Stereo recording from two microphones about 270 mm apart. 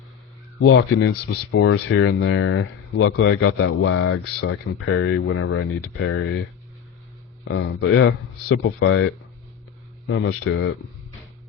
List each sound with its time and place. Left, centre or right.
0.6 s speech: left
7.4 s speech: left
10.1 s speech: left